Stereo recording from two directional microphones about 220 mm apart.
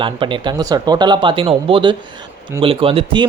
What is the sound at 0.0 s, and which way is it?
Speech, 20° right (ahead or behind).